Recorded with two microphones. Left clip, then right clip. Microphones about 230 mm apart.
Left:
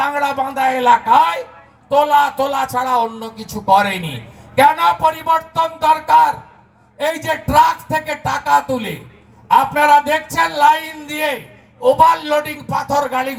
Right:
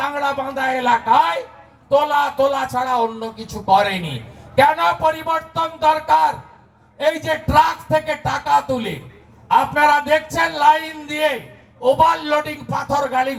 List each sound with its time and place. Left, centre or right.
0.0 s a man's voice: left